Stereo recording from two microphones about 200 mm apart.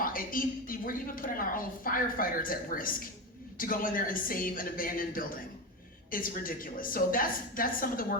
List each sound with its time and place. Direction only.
0.0 s a woman's voice: 45° left (ahead or behind)